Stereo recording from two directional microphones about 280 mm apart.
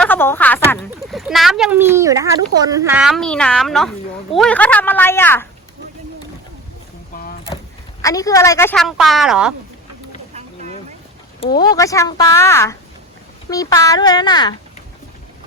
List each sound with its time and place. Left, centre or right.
0.0 s a woman's voice: centre
7.2 s a sound: left
8.0 s speech: centre
11.6 s a woman's voice: centre